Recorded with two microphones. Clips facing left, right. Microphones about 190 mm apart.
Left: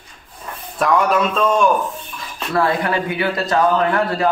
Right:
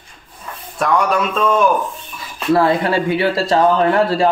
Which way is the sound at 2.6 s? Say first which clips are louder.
Right 3 dB; 30° right (ahead or behind).